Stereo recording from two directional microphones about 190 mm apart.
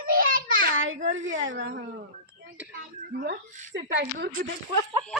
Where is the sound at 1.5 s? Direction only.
55° right (ahead or behind).